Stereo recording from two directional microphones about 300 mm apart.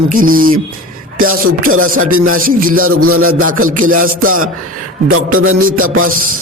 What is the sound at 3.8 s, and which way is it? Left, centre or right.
Speech, right.